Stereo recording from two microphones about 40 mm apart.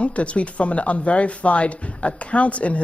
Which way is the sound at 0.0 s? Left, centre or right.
Left.